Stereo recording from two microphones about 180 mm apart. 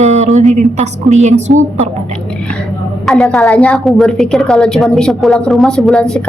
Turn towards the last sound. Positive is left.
turn(degrees=5)  # may be behind; listen again after turning